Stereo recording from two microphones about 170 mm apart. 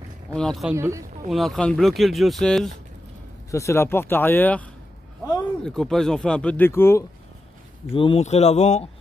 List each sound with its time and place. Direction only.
0.3 s speech: 5° left (ahead or behind)
0.7 s speech: 15° right (ahead or behind)
1.3 s speech: centre (ahead or behind)
3.5 s speech: 15° left (ahead or behind)
7.9 s speech: 30° left (ahead or behind)